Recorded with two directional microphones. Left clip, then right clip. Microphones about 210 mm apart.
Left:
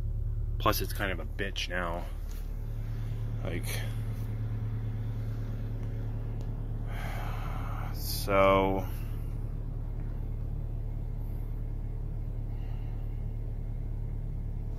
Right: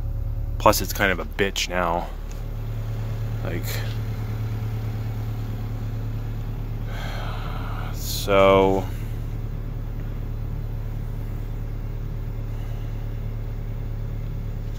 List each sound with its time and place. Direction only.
0.6 s speech: 20° right (ahead or behind)
3.4 s speech: centre (ahead or behind)
7.0 s a sound: 5° right (ahead or behind)
8.3 s speech: 20° right (ahead or behind)